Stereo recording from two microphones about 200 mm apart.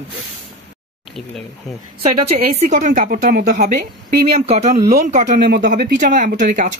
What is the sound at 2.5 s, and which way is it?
A woman's voice, 40° right (ahead or behind).